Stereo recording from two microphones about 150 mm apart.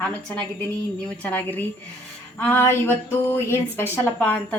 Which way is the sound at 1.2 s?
10° left (ahead or behind).